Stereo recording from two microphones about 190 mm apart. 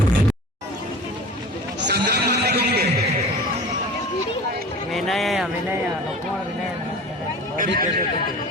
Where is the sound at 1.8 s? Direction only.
60° right (ahead or behind).